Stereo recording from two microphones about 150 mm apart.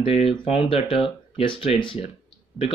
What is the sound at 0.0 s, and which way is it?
Speech, 40° left (ahead or behind).